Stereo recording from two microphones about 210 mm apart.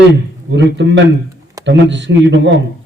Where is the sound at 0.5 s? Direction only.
60° right (ahead or behind).